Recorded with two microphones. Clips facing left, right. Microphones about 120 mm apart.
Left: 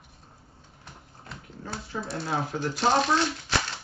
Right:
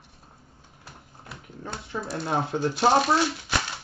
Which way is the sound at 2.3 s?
25° right (ahead or behind).